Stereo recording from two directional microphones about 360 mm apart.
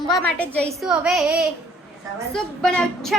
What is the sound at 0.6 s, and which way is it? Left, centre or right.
Child singing, centre.